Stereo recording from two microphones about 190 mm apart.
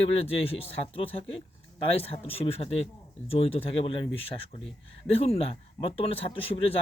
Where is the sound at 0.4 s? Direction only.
30° left (ahead or behind).